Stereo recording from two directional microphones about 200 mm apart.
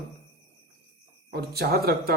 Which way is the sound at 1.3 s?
50° right (ahead or behind).